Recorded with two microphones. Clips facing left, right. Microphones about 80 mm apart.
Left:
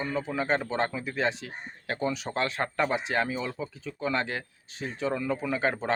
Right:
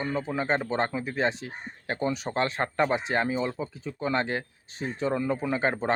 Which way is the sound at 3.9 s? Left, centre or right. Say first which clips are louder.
Right 2 dB; right.